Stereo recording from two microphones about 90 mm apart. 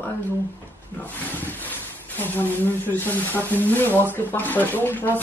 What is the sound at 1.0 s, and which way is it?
Speech, 20° left (ahead or behind).